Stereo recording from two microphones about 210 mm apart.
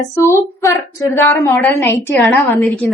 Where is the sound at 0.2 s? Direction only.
15° left (ahead or behind).